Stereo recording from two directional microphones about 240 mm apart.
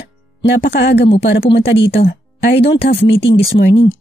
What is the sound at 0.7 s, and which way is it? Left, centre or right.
Speech, left.